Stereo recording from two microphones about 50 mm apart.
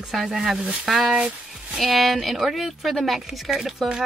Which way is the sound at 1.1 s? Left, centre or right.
Right.